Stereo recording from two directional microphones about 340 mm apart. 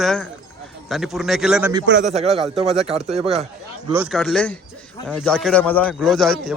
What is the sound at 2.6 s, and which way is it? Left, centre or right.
Speech, centre.